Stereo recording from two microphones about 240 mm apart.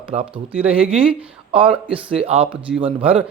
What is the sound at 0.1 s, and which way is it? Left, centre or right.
Speech, right.